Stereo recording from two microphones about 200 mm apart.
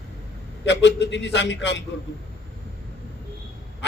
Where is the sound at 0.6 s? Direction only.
60° left (ahead or behind).